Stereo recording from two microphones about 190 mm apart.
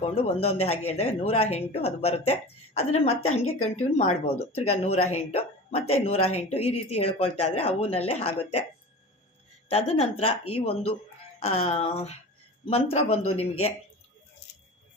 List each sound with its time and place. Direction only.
0.0 s speech: 30° left (ahead or behind)
9.6 s speech: 30° left (ahead or behind)